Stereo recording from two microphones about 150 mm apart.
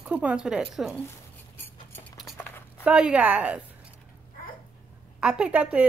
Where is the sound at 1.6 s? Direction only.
15° left (ahead or behind).